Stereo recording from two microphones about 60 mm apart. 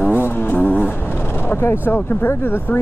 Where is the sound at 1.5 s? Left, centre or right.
Left.